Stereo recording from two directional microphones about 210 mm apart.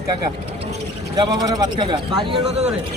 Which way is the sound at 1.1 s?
20° right (ahead or behind).